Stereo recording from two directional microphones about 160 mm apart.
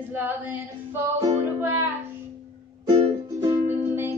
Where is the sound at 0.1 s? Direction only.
10° right (ahead or behind).